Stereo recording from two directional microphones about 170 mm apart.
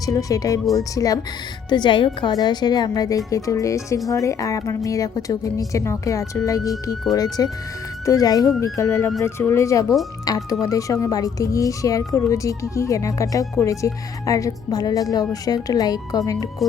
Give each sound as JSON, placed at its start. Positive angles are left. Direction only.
{"t": 0.0, "sound": "speech", "side_deg": 20}